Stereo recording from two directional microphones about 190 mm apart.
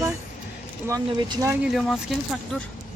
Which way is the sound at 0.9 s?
20° right (ahead or behind).